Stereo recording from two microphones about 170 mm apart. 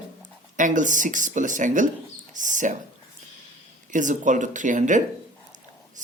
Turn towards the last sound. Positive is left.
turn(degrees=-45)  # may be behind; listen again after turning